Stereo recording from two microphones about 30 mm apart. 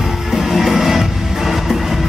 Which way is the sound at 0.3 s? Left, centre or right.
Centre.